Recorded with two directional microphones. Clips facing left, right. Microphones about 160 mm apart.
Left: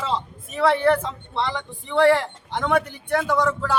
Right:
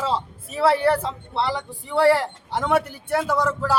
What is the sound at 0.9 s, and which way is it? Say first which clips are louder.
Speech: right 2 dB; 35° right (ahead or behind).